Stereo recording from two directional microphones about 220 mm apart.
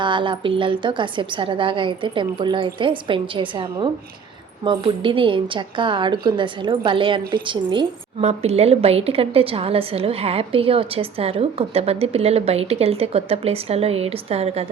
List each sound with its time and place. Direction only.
0.0 s a woman's voice: 20° right (ahead or behind)